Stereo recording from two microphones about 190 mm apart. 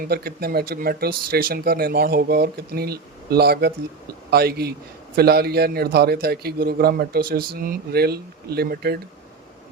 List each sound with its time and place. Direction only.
0.1 s a man's voice: 55° right (ahead or behind)